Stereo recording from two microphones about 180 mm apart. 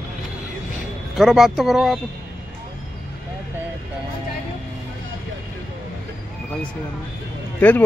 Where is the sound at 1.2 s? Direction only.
Centre (ahead or behind).